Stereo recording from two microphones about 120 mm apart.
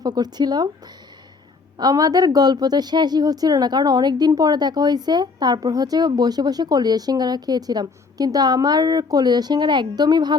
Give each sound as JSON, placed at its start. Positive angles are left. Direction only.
{"t": 0.0, "sound": "a woman's voice", "side_deg": -35}
{"t": 1.8, "sound": "a woman's voice", "side_deg": -30}